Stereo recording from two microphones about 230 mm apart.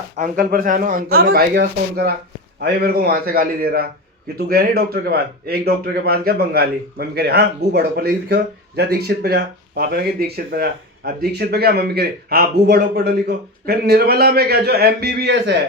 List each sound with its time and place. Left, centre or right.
0.2 s a man's voice: right